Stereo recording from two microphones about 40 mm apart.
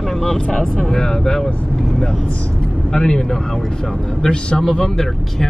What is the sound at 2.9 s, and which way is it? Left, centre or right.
Speech, centre.